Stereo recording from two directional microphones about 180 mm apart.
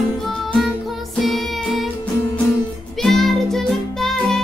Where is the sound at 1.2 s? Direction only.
Centre (ahead or behind).